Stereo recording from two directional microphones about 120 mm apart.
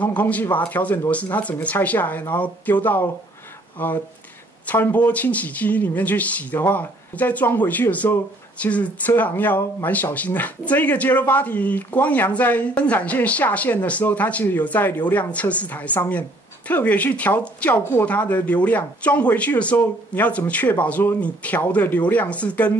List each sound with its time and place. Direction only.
0.0 s speech: 10° left (ahead or behind)